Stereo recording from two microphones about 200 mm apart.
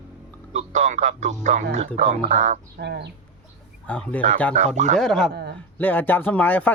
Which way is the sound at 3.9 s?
5° left (ahead or behind).